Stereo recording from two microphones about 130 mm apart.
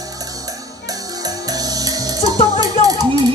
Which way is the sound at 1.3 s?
30° right (ahead or behind).